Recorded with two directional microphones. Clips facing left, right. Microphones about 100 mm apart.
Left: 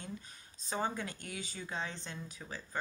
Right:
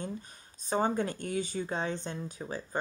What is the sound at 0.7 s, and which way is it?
Speech, 40° right (ahead or behind).